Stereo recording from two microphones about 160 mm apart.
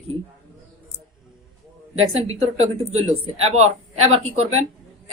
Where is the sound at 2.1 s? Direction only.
40° right (ahead or behind).